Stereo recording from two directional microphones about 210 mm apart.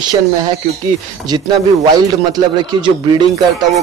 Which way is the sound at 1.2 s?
20° right (ahead or behind).